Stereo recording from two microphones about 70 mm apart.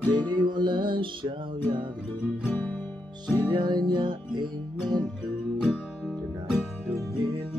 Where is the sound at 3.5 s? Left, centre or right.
Right.